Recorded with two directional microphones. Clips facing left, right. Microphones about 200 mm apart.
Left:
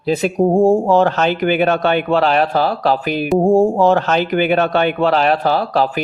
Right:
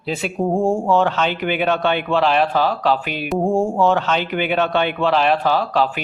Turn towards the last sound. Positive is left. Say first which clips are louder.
# left 2 dB
turn(degrees=40)  # may be behind; listen again after turning